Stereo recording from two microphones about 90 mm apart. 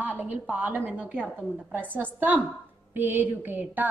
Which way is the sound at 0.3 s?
20° right (ahead or behind).